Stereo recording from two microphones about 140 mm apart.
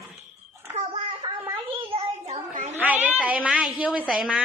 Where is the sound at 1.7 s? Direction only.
40° right (ahead or behind).